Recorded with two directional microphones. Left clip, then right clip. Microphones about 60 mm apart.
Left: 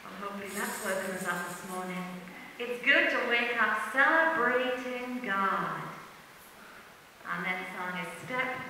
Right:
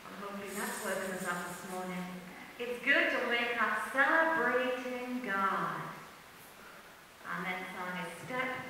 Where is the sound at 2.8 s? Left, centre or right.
Left.